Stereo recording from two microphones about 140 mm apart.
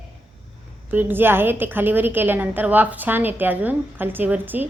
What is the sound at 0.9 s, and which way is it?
A woman's voice, 15° right (ahead or behind).